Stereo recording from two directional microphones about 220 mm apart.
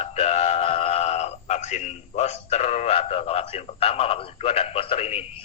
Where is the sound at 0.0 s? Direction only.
30° left (ahead or behind).